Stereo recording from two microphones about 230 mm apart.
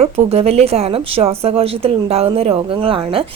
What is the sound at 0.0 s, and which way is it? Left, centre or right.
A woman's voice, right.